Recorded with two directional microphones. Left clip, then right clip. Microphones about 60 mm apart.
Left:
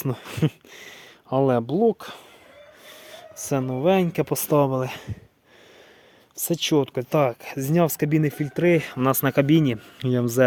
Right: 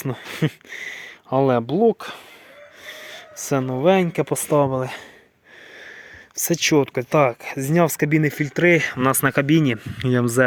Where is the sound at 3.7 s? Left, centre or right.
Right.